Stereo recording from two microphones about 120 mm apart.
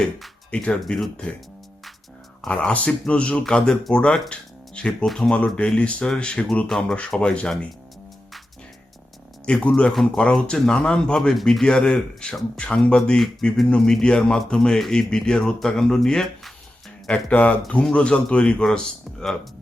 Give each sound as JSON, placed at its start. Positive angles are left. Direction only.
{"t": 0.0, "sound": "speech", "side_deg": 5}
{"t": 2.4, "sound": "speech", "side_deg": 5}
{"t": 9.5, "sound": "speech", "side_deg": 10}